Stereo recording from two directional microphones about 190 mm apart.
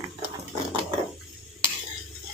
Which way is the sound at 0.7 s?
25° right (ahead or behind).